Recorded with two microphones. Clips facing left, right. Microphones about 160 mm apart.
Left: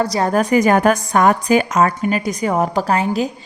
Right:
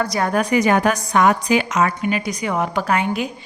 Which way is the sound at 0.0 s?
35° left (ahead or behind).